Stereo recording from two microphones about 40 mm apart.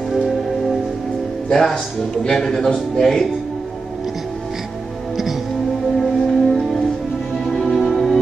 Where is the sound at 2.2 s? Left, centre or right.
Centre.